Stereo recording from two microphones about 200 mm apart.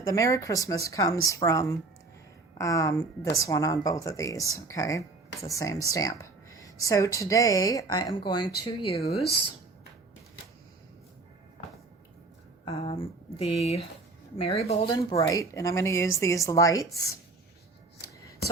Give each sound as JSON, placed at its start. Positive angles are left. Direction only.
{"t": 0.0, "sound": "a woman's voice", "side_deg": 15}
{"t": 12.6, "sound": "speech", "side_deg": 30}
{"t": 15.3, "sound": "a woman's voice", "side_deg": 15}